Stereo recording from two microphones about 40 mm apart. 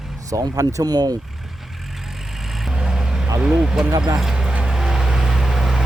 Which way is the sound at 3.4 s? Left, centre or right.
Right.